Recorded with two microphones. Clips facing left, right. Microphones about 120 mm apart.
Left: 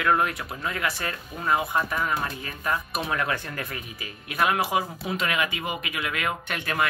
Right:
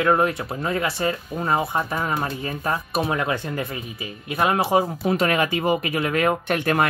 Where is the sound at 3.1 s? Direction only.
20° right (ahead or behind).